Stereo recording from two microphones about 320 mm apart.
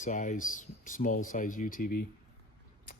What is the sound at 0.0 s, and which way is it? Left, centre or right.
Speech, left.